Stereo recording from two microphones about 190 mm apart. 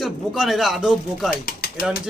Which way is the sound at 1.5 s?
50° left (ahead or behind).